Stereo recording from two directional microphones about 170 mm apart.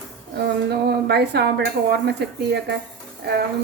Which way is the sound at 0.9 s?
75° right (ahead or behind).